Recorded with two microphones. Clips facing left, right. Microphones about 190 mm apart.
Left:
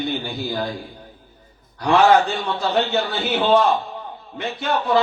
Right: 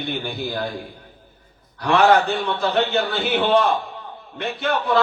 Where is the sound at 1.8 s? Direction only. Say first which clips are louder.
Left 1 dB; 55° right (ahead or behind).